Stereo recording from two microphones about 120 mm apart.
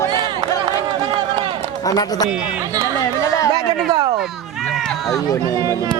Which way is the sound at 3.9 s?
35° right (ahead or behind).